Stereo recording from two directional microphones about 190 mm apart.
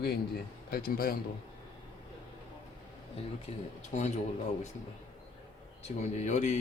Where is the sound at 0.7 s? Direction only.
50° left (ahead or behind).